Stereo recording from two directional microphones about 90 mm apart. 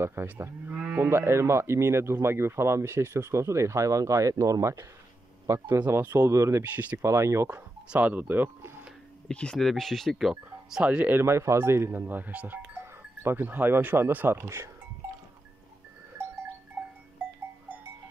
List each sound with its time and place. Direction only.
0.0 s speech: 30° right (ahead or behind)
6.6 s speech: 15° right (ahead or behind)
7.0 s speech: 35° right (ahead or behind)
7.9 s speech: 15° right (ahead or behind)
9.3 s speech: 10° left (ahead or behind); by 14.7 s 30° right (ahead or behind)
16.8 s livestock: 20° right (ahead or behind)